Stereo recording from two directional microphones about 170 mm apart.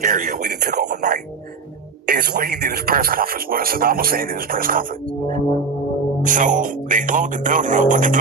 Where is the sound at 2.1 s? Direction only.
70° right (ahead or behind).